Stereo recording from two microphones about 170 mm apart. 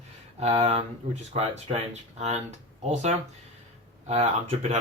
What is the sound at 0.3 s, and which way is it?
Speech, 40° right (ahead or behind).